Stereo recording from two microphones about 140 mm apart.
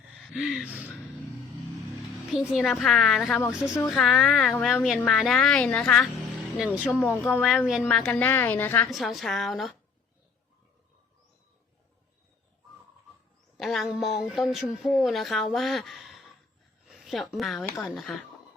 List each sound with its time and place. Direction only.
0.3 s speech: 5° right (ahead or behind)
2.5 s speech: centre (ahead or behind)
6.6 s speech: 5° right (ahead or behind)
6.8 s a woman's voice: 10° left (ahead or behind)
7.4 s a woman's voice: centre (ahead or behind)
8.9 s speech: centre (ahead or behind)
13.6 s speech: centre (ahead or behind)
17.7 s speech: 20° left (ahead or behind)
17.9 s speech: centre (ahead or behind)